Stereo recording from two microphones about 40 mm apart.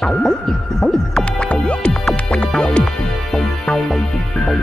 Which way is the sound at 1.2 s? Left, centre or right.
Left.